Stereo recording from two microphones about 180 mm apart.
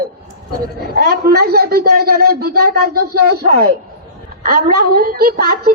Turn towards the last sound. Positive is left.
turn(degrees=-55)  # may be behind; listen again after turning